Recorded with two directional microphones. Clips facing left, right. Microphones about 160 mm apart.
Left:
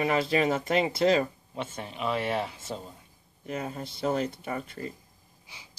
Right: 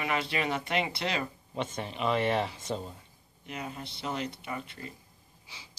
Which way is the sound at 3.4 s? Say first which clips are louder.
Left 5 dB; 40° left (ahead or behind).